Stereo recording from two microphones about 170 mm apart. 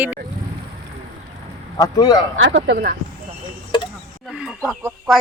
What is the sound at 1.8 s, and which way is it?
Speech, 20° left (ahead or behind).